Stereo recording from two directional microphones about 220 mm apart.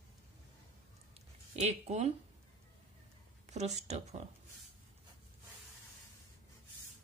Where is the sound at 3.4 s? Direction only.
30° right (ahead or behind).